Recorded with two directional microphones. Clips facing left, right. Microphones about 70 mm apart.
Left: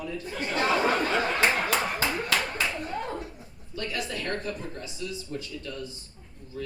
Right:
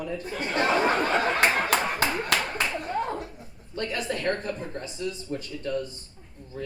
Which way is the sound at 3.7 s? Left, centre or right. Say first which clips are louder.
Right 3 dB; right.